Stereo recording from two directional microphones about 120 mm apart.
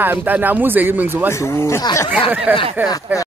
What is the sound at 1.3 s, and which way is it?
Speech, 25° left (ahead or behind).